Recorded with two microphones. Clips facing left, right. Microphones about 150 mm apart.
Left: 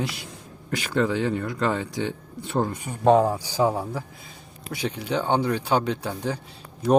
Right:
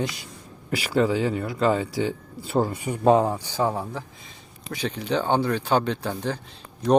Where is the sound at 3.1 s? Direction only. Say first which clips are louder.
Left 2 dB; 5° left (ahead or behind).